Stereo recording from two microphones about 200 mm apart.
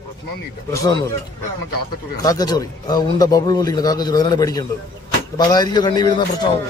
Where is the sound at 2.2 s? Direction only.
20° left (ahead or behind).